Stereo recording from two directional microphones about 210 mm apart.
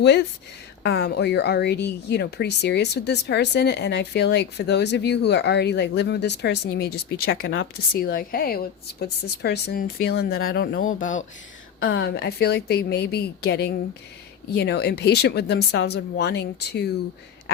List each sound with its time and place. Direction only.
0.0 s a woman's voice: 55° left (ahead or behind)
7.9 s a woman's voice: 45° left (ahead or behind)
11.8 s a woman's voice: 65° left (ahead or behind)